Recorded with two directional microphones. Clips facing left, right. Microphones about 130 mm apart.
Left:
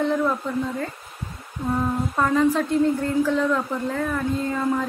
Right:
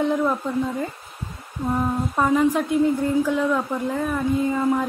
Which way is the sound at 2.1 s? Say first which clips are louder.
Right 1 dB; 15° right (ahead or behind).